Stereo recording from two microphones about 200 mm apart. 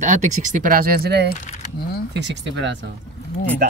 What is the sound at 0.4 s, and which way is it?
Speech, 40° right (ahead or behind).